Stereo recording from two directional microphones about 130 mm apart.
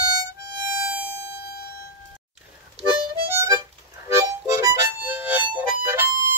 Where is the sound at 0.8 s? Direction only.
10° right (ahead or behind).